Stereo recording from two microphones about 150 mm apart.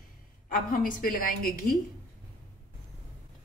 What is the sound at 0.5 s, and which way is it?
Speech, 70° left (ahead or behind).